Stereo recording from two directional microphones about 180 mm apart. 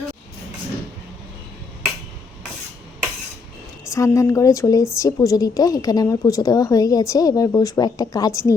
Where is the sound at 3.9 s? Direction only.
15° left (ahead or behind).